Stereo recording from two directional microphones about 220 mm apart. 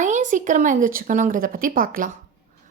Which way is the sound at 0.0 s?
35° right (ahead or behind).